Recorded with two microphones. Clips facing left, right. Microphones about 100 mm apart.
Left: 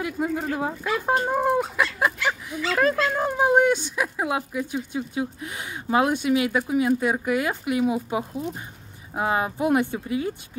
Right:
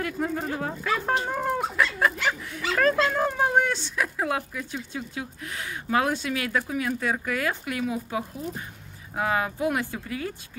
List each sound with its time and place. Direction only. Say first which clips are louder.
0.0 s speech: left 2 dB; 10° left (ahead or behind)